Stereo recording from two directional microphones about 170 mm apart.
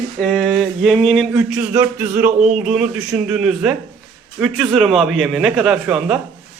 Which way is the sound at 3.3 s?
5° right (ahead or behind).